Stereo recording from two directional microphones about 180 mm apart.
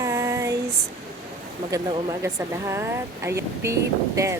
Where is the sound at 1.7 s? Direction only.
20° right (ahead or behind).